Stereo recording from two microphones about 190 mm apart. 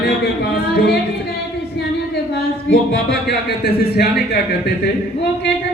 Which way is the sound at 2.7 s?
65° left (ahead or behind).